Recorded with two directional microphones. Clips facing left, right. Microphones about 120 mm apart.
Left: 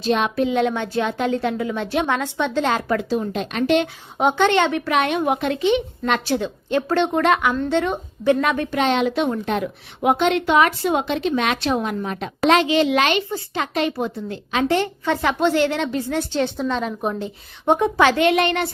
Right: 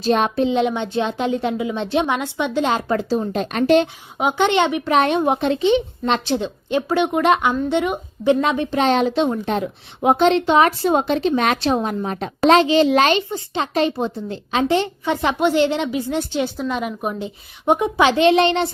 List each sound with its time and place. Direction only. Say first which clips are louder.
0.0 s a woman's voice: right 2 dB; 40° right (ahead or behind)
0.3 s a woman's voice: right 1 dB; 25° right (ahead or behind)
3.0 s a woman's voice: right 2 dB; 35° right (ahead or behind)
4.4 s a woman's voice: right 2 dB; 20° right (ahead or behind)
4.9 s a woman's voice: right 3 dB; 35° right (ahead or behind)
8.8 s a woman's voice: right 2 dB; 35° right (ahead or behind)
9.1 s a woman's voice: right 2 dB; 25° right (ahead or behind)
13.3 s a woman's voice: right 2 dB; 25° right (ahead or behind)